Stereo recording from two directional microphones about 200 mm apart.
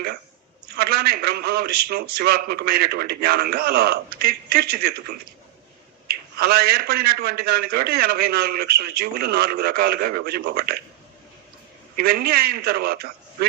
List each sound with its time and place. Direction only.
0.8 s a man's voice: 50° right (ahead or behind)
6.3 s a man's voice: 50° right (ahead or behind)
11.9 s a man's voice: 50° right (ahead or behind)